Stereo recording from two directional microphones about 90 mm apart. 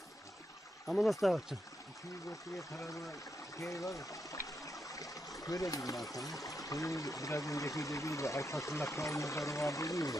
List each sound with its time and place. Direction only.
0.8 s speech: centre (ahead or behind)
2.7 s speech: 35° left (ahead or behind)
3.5 s stream: 35° left (ahead or behind)
6.0 s speech: 40° left (ahead or behind)